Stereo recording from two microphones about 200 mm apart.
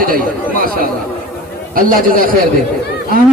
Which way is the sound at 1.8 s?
45° right (ahead or behind).